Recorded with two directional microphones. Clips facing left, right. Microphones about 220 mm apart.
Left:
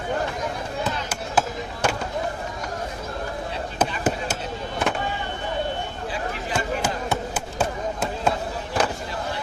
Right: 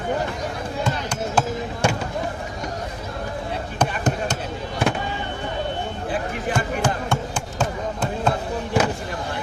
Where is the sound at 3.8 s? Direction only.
5° left (ahead or behind).